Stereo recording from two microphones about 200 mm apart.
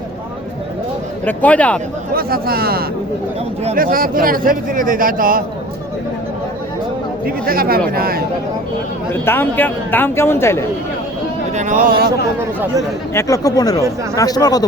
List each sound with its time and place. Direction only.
1.2 s speech: 10° left (ahead or behind)
2.1 s a man's voice: 50° right (ahead or behind)
7.3 s a man's voice: 50° right (ahead or behind)
9.2 s speech: 10° left (ahead or behind)
11.5 s speech: 40° right (ahead or behind)
13.1 s speech: 15° left (ahead or behind)